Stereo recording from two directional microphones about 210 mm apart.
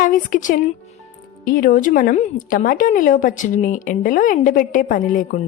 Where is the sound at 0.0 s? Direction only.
40° left (ahead or behind).